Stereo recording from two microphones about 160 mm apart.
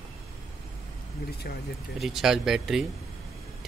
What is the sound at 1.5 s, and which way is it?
Speech, 70° left (ahead or behind).